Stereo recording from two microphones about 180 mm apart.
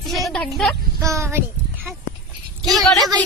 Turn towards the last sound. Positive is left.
turn(degrees=0)  # may be behind; listen again after turning